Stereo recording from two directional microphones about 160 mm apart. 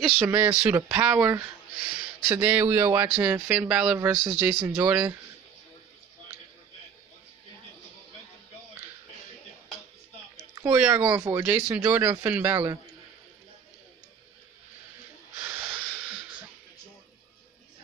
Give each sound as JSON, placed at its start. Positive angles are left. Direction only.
{"t": 0.0, "sound": "speech", "side_deg": 0}
{"t": 0.3, "sound": "speech", "side_deg": -10}
{"t": 10.5, "sound": "a sound", "side_deg": -15}
{"t": 11.1, "sound": "speech", "side_deg": -20}
{"t": 11.4, "sound": "speech", "side_deg": -10}
{"t": 15.3, "sound": "wheeze", "side_deg": -10}